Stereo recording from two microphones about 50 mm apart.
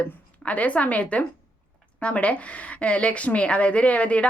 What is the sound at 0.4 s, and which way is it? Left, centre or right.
A woman's voice, left.